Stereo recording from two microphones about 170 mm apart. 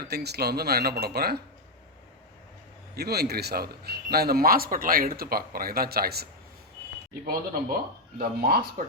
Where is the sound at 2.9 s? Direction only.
70° right (ahead or behind).